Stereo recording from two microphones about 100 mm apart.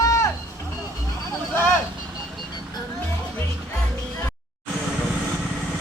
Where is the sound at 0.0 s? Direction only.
35° left (ahead or behind).